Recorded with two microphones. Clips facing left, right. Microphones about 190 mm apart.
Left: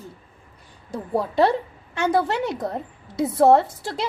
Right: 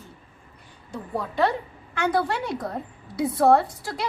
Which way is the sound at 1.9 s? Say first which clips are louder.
Left 3 dB; 20° left (ahead or behind).